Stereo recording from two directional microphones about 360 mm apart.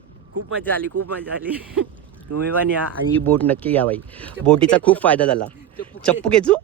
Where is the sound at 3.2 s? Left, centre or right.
Centre.